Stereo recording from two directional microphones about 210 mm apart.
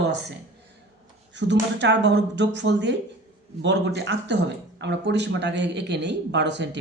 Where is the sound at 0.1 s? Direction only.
55° right (ahead or behind).